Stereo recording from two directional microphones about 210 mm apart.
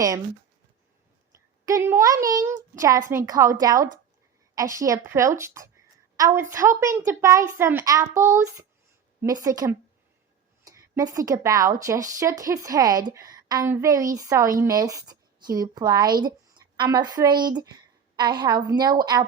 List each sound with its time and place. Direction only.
1.6 s a woman's voice: 15° right (ahead or behind)